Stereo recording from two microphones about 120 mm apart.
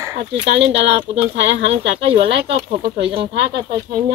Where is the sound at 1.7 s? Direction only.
55° right (ahead or behind).